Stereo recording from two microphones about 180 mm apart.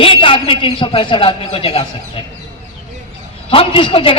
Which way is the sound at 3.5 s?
30° left (ahead or behind).